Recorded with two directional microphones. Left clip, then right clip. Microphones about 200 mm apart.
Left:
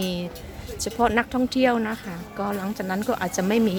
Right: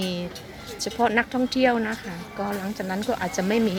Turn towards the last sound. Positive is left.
turn(degrees=10)  # may be behind; listen again after turning